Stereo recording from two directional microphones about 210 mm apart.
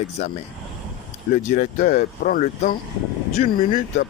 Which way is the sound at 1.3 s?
40° left (ahead or behind).